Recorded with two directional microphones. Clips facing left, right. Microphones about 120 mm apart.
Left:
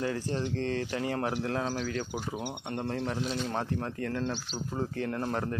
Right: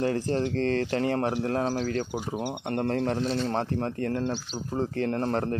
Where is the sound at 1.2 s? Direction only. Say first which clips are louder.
Right 4 dB; 30° right (ahead or behind).